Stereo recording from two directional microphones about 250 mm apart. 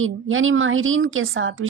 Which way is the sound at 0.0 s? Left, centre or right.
Right.